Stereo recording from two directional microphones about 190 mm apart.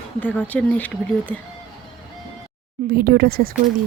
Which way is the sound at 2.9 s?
55° right (ahead or behind).